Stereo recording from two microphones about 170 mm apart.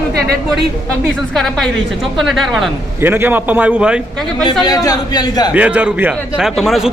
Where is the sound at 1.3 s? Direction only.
5° left (ahead or behind).